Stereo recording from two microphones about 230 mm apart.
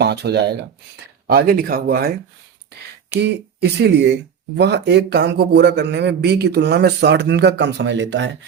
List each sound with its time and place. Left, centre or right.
0.0 s speech: right
3.2 s speech: right